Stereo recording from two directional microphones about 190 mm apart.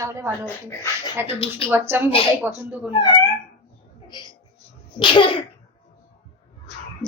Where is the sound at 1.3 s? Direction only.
30° left (ahead or behind).